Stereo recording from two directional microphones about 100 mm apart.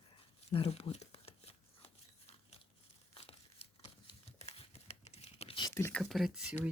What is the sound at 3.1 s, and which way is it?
Crumpling, 70° left (ahead or behind).